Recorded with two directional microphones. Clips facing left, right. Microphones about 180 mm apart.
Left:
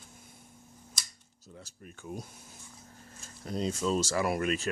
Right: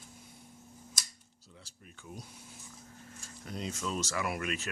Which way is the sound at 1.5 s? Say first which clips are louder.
Left 7 dB; 45° left (ahead or behind).